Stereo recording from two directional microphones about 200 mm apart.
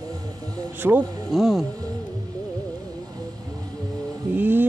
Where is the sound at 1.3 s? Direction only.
Centre (ahead or behind).